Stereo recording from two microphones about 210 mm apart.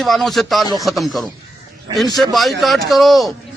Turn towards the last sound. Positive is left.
turn(degrees=0)  # may be behind; listen again after turning